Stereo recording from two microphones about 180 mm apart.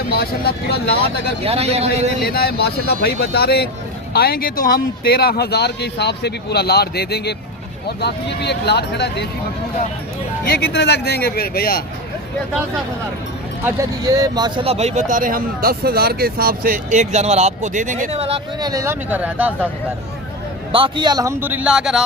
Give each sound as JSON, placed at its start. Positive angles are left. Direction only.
{"t": 0.1, "sound": "speech", "side_deg": 60}
{"t": 1.5, "sound": "speech", "side_deg": -35}
{"t": 2.2, "sound": "speech", "side_deg": 60}
{"t": 10.6, "sound": "speech", "side_deg": 65}
{"t": 13.7, "sound": "speech", "side_deg": -15}
{"t": 18.6, "sound": "speech", "side_deg": -20}
{"t": 20.7, "sound": "speech", "side_deg": -25}